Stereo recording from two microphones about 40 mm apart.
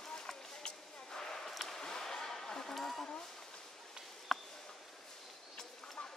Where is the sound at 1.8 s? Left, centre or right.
Centre.